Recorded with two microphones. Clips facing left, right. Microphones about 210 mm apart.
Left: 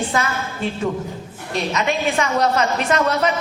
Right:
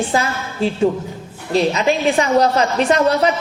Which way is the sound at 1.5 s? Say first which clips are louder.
Right 6 dB; 30° right (ahead or behind).